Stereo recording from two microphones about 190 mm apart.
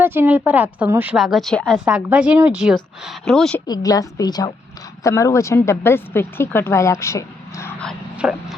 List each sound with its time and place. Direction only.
0.0 s a woman's voice: 10° right (ahead or behind)
3.7 s a woman's voice: 20° left (ahead or behind)
8.1 s speech: 5° right (ahead or behind)